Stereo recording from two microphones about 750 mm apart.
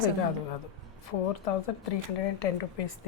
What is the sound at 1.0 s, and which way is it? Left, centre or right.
Speech, left.